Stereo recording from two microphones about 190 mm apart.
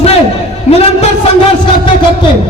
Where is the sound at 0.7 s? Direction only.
35° left (ahead or behind).